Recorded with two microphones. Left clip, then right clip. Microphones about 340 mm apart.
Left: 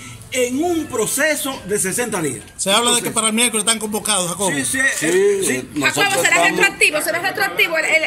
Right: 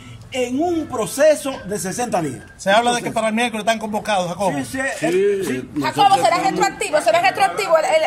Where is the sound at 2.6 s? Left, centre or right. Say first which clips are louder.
Right 1 dB; centre.